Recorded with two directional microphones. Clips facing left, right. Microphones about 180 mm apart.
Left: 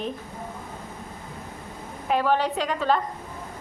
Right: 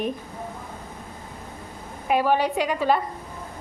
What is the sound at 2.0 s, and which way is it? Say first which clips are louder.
Speech: right 2 dB; 10° right (ahead or behind).